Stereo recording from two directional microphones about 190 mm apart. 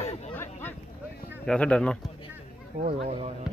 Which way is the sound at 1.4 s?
5° left (ahead or behind).